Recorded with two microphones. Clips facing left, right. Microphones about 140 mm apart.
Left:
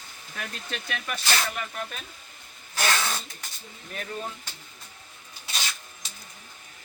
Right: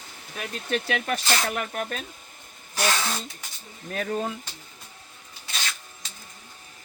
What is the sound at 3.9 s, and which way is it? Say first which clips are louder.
Speech: right 7 dB; 60° right (ahead or behind).